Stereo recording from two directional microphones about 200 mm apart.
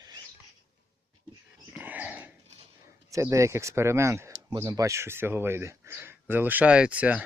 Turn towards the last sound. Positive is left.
turn(degrees=-5)  # may be behind; listen again after turning